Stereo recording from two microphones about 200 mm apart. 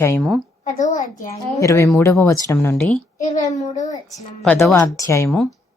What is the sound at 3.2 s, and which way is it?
Speech, 40° left (ahead or behind).